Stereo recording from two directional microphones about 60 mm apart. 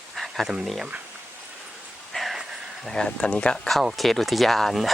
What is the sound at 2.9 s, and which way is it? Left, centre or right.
Speech, centre.